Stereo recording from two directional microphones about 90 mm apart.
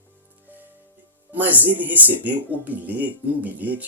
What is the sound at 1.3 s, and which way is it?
Speech, 20° right (ahead or behind).